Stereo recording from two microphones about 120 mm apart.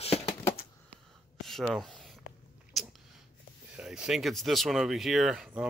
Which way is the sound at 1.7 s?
Centre (ahead or behind).